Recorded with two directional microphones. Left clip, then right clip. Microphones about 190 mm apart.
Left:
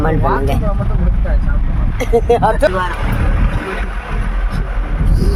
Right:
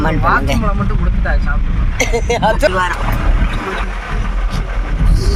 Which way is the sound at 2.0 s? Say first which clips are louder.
Left 3 dB; 50° left (ahead or behind).